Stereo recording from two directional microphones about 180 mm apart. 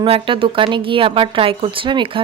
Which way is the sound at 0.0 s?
30° right (ahead or behind).